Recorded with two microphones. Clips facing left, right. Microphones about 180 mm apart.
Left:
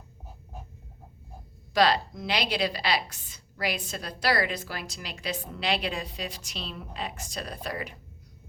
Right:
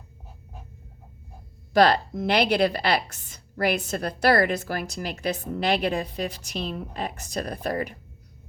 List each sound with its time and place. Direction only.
1.7 s a woman's voice: 50° right (ahead or behind)